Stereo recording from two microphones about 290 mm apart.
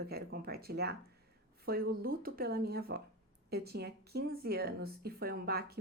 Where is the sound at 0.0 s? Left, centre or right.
Right.